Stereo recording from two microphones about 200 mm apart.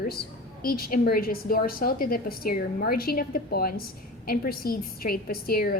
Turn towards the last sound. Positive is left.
turn(degrees=50)  # may be behind; listen again after turning